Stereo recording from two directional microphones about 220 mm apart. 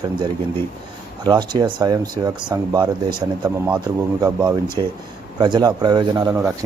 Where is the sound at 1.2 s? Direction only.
20° right (ahead or behind).